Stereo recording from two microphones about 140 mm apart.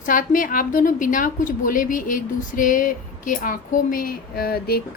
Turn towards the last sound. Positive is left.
turn(degrees=90)